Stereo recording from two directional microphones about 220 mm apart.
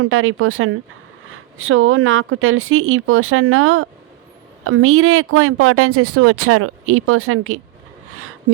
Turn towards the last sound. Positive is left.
turn(degrees=-75)  # may be behind; listen again after turning